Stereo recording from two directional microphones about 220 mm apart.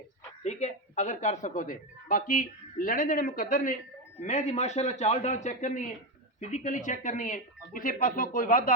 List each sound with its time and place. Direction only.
0.4 s speech: 30° left (ahead or behind)